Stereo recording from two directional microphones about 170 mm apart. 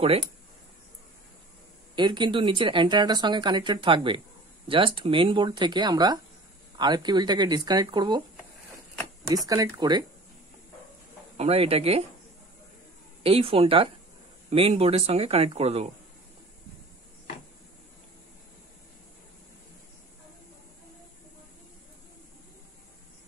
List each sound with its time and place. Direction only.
2.0 s speech: 25° right (ahead or behind)
9.5 s speech: 25° right (ahead or behind)
11.3 s speech: 35° right (ahead or behind)
13.2 s speech: 35° right (ahead or behind)